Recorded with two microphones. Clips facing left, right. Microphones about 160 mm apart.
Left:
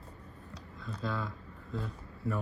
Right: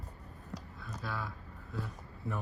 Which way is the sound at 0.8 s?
10° right (ahead or behind).